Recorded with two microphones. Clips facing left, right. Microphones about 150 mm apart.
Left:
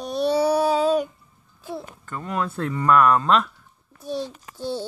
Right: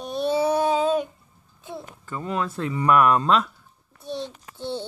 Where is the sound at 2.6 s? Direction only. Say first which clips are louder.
Left 1 dB; 15° right (ahead or behind).